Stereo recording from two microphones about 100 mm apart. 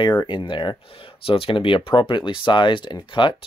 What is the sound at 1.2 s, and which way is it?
Speech, 70° left (ahead or behind).